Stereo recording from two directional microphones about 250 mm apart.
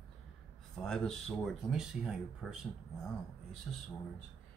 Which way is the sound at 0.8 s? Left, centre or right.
Centre.